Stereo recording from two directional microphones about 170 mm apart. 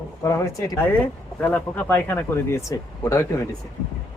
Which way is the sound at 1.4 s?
10° left (ahead or behind).